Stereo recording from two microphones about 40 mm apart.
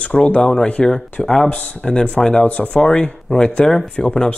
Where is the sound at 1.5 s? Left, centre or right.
Left.